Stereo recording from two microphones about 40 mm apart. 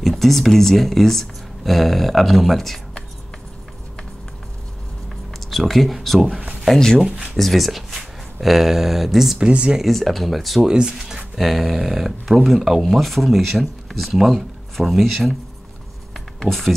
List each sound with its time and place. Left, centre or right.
0.0 s speech: centre
5.5 s speech: centre
9.4 s speech: right
9.8 s speech: centre
10.7 s speech: centre
11.3 s speech: centre
16.3 s speech: centre